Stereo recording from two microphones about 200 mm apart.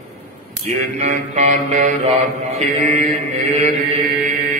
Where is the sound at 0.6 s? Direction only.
35° right (ahead or behind).